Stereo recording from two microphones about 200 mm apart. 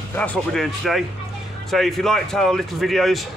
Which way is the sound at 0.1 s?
5° left (ahead or behind).